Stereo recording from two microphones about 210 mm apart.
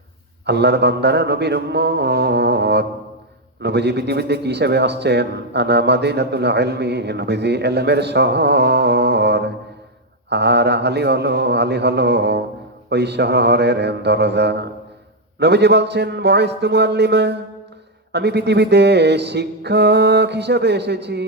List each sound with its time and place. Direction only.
0.4 s a man's voice: 55° right (ahead or behind)